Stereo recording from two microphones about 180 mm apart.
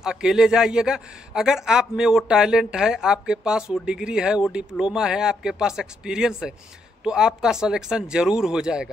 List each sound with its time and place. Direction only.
0.0 s a man's voice: 5° right (ahead or behind)